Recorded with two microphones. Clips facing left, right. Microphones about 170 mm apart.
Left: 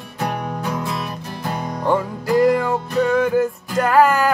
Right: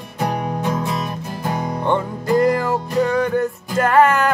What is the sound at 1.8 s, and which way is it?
Music, 5° left (ahead or behind).